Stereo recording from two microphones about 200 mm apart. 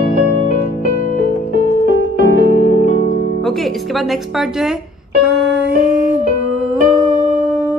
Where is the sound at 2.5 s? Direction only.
45° left (ahead or behind).